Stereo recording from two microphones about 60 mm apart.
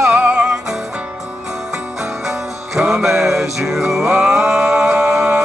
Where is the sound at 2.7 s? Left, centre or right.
Centre.